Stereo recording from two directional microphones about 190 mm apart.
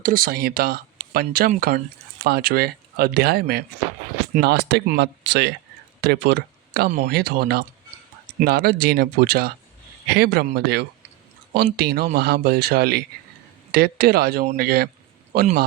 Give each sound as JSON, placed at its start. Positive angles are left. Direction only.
{"t": 0.0, "sound": "speech", "side_deg": -45}